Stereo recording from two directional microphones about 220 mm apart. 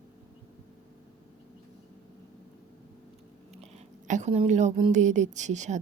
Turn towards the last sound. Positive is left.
turn(degrees=-30)  # may be behind; listen again after turning